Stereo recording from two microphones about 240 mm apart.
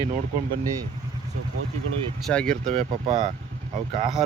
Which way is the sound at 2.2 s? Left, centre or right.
Centre.